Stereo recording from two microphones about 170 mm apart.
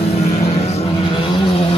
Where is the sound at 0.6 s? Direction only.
35° left (ahead or behind).